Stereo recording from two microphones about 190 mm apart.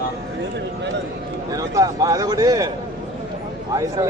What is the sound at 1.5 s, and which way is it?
A man's voice, 20° right (ahead or behind).